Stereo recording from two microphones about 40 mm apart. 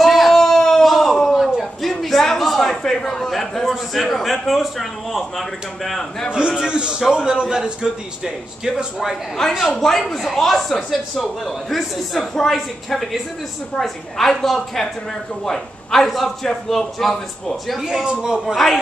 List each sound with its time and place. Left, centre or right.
0.0 s a sound: centre
3.3 s a man's voice: centre
6.3 s a man's voice: centre
9.4 s a man's voice: centre
18.2 s speech: centre
18.5 s a man's voice: centre